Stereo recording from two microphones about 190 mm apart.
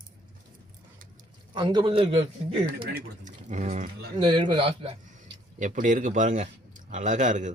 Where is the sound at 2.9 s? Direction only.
40° right (ahead or behind).